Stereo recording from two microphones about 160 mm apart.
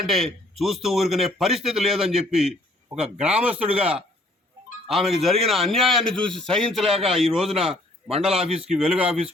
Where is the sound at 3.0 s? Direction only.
40° right (ahead or behind).